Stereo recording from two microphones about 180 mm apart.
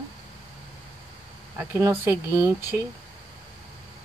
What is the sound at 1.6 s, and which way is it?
Speech, 10° right (ahead or behind).